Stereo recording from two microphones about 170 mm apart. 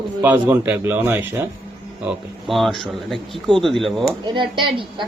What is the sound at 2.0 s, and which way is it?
A man's voice, centre (ahead or behind).